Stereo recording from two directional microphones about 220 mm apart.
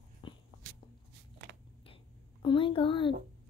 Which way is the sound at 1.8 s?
25° left (ahead or behind).